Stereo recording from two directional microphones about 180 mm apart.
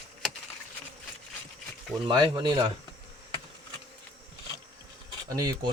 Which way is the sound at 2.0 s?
25° right (ahead or behind).